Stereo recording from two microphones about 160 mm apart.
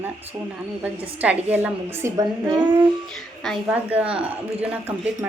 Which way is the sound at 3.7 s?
10° right (ahead or behind).